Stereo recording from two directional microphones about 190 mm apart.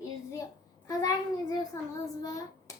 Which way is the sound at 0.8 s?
20° left (ahead or behind).